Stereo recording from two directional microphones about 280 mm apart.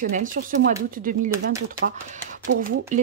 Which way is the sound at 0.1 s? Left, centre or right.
Right.